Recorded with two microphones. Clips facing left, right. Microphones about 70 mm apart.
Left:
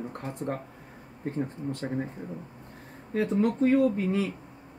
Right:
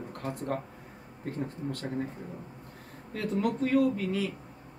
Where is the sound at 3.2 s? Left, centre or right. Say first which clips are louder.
Left 5 dB; left.